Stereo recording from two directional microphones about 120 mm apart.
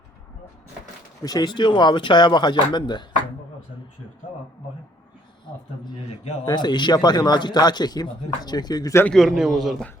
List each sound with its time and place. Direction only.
1.2 s speech: 35° left (ahead or behind)
6.4 s speech: 35° left (ahead or behind)
9.0 s a man's voice: centre (ahead or behind)